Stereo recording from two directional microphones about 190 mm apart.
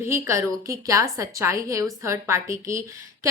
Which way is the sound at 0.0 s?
15° right (ahead or behind).